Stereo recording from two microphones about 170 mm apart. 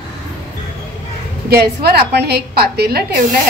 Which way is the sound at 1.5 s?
70° right (ahead or behind).